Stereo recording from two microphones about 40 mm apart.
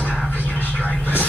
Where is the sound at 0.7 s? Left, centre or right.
Left.